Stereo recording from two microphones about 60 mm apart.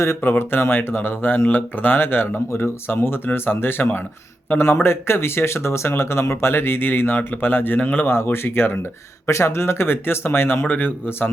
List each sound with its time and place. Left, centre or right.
0.2 s speech: left
8.1 s speech: left
9.3 s speech: left